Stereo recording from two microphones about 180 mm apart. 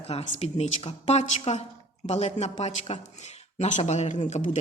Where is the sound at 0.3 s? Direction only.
35° left (ahead or behind).